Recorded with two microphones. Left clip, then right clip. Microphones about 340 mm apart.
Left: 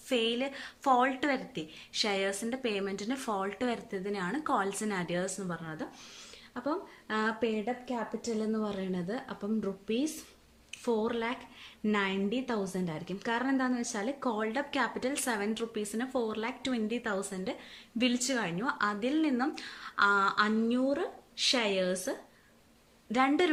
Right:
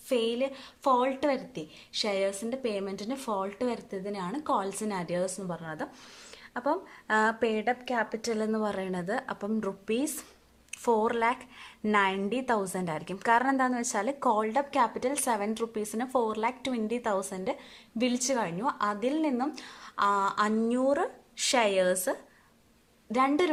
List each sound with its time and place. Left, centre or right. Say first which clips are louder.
0.1 s a woman's voice: right 2 dB; centre
23.1 s a woman's voice: right 2 dB; centre